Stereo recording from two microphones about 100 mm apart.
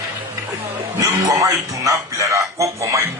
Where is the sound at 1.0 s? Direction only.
35° right (ahead or behind).